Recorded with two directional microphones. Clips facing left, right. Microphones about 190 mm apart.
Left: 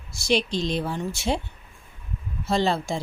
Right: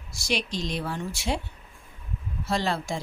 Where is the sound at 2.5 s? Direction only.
25° left (ahead or behind).